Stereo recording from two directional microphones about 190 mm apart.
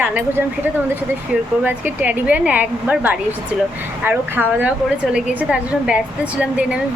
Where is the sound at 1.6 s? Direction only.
10° right (ahead or behind).